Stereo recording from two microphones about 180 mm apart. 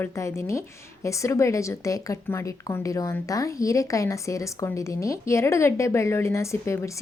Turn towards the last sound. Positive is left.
turn(degrees=15)  # may be behind; listen again after turning